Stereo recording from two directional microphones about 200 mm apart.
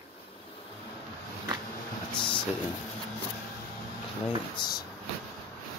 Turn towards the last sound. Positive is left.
turn(degrees=20)  # may be behind; listen again after turning